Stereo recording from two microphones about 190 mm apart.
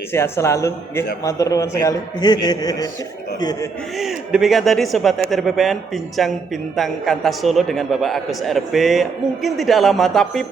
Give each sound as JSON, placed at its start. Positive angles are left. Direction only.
{"t": 0.1, "sound": "a man's voice", "side_deg": 15}
{"t": 3.9, "sound": "a man's voice", "side_deg": 0}